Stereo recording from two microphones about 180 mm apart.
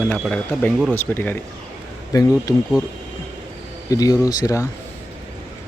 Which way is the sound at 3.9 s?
20° left (ahead or behind).